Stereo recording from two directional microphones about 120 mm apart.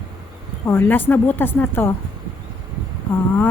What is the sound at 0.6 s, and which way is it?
A woman's voice, 20° left (ahead or behind).